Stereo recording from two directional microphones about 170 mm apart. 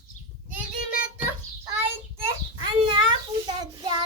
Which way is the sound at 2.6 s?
30° right (ahead or behind).